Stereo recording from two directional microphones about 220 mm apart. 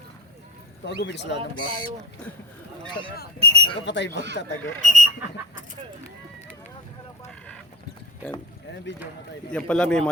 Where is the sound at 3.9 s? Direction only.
50° left (ahead or behind).